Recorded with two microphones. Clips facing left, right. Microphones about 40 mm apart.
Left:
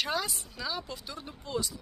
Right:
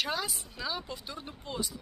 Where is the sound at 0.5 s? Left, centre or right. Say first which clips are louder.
Even; centre.